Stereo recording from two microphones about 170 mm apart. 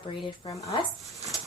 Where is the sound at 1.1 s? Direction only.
Centre (ahead or behind).